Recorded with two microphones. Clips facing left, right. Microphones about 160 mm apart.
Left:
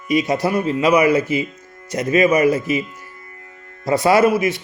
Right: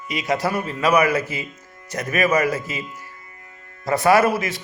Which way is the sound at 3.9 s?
20° left (ahead or behind).